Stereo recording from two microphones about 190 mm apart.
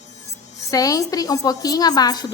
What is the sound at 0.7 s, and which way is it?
A woman's voice, 20° left (ahead or behind).